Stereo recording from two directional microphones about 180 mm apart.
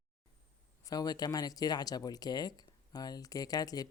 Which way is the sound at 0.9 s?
20° left (ahead or behind).